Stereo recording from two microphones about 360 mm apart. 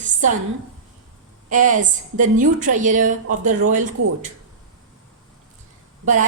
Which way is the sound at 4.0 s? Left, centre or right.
Right.